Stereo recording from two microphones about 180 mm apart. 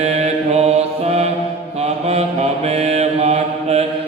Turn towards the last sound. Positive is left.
turn(degrees=-35)  # may be behind; listen again after turning